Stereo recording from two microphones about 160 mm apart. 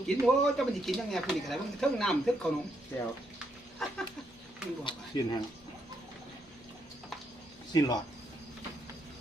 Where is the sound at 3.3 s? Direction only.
5° left (ahead or behind).